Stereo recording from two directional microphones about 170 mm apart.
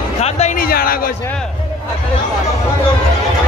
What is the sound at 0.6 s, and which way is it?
Speech, 60° left (ahead or behind).